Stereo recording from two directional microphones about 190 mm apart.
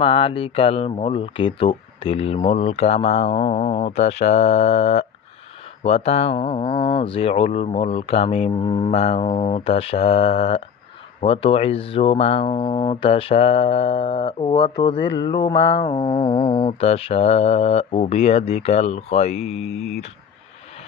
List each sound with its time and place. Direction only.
0.0 s speech: 25° left (ahead or behind)
11.1 s mantra: 30° left (ahead or behind)
16.6 s speech: 30° left (ahead or behind)